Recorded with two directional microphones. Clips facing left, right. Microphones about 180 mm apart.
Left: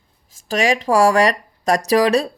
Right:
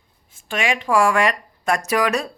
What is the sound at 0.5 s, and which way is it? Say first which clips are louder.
Speech: left 3 dB; 40° left (ahead or behind).